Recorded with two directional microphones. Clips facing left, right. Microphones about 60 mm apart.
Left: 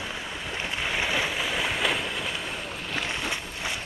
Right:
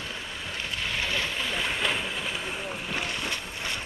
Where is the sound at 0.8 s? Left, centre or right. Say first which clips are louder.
Left 3 dB; centre.